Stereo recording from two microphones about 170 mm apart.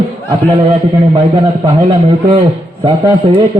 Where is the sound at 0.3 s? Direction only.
30° right (ahead or behind).